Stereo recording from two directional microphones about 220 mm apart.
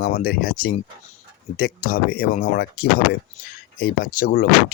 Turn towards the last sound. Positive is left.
turn(degrees=40)  # may be behind; listen again after turning